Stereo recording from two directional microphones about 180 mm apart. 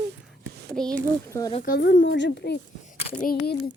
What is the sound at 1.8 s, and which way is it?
Speech, 85° left.